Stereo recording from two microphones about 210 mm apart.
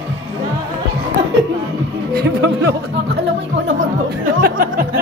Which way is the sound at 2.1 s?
55° right (ahead or behind).